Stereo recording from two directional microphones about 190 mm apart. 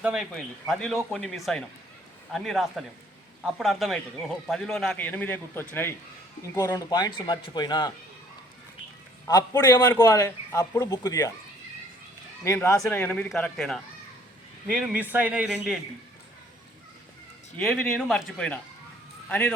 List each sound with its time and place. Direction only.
0.0 s a man's voice: 5° right (ahead or behind); by 7.9 s 20° left (ahead or behind)
9.2 s a man's voice: 20° left (ahead or behind)
12.5 s a man's voice: 15° left (ahead or behind); by 15.8 s 5° right (ahead or behind)
17.6 s a man's voice: centre (ahead or behind)